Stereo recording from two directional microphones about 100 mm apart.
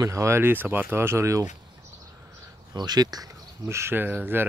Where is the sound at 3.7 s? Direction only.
25° right (ahead or behind).